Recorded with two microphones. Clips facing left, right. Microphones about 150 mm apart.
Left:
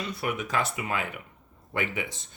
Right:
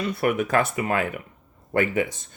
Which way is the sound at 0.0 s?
55° right (ahead or behind).